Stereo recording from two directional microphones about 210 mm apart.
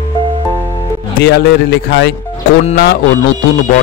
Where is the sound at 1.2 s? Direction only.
55° left (ahead or behind).